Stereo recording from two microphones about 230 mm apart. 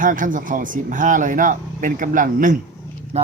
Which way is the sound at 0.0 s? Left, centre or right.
Right.